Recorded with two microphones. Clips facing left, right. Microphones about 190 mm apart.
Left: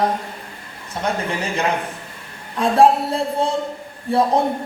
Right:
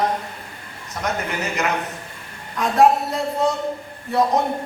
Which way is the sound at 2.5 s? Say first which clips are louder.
Left 2 dB; 30° left (ahead or behind).